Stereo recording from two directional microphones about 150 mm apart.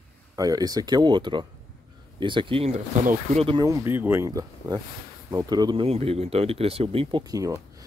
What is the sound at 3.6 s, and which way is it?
Speech, 20° right (ahead or behind).